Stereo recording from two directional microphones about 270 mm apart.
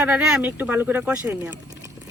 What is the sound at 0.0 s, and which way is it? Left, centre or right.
Speech, centre.